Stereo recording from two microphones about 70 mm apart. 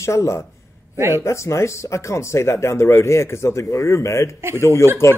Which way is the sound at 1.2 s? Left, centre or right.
Left.